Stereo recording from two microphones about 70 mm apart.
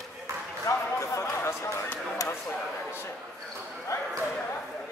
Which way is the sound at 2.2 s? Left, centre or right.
Left.